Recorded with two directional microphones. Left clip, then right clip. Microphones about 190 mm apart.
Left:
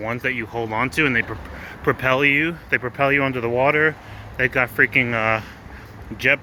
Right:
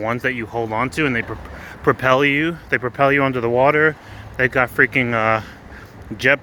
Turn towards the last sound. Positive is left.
turn(degrees=-25)  # may be behind; listen again after turning